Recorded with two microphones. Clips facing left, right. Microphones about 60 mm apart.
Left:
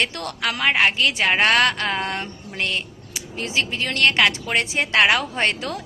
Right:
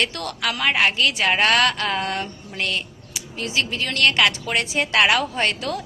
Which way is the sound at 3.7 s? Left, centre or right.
Left.